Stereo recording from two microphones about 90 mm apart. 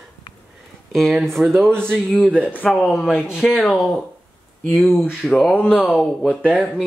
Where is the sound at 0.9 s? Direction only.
5° left (ahead or behind).